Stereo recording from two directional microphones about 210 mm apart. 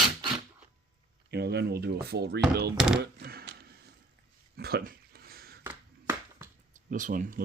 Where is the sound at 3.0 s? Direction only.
50° right (ahead or behind).